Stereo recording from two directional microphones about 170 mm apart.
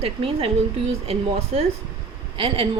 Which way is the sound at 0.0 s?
35° right (ahead or behind).